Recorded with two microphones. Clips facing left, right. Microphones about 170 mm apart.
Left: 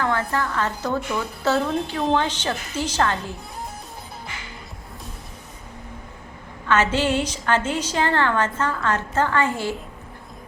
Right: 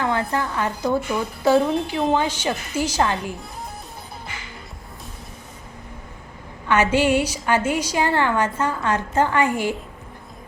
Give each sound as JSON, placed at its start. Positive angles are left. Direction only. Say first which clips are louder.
{"t": 0.0, "sound": "a woman's voice", "louder": "right 1 dB", "side_deg": -20}
{"t": 6.7, "sound": "a woman's voice", "louder": "right 2 dB", "side_deg": -10}